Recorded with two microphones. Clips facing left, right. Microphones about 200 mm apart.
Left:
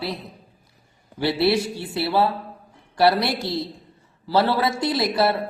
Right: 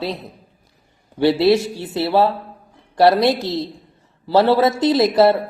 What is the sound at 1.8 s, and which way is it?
Mantra, 20° right (ahead or behind).